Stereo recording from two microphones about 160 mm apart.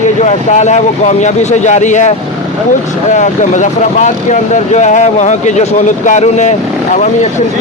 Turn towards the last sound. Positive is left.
turn(degrees=50)  # may be behind; listen again after turning